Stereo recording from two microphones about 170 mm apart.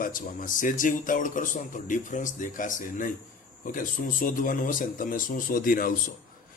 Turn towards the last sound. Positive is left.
turn(degrees=55)  # may be behind; listen again after turning